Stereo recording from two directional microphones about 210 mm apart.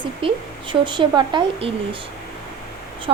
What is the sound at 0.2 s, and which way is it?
A woman's voice, 25° right (ahead or behind).